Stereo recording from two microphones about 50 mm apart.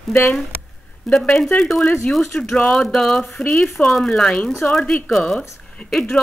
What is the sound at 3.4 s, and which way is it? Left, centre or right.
Speech, left.